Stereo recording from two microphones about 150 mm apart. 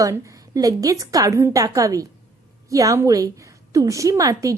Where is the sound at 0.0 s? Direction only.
20° right (ahead or behind).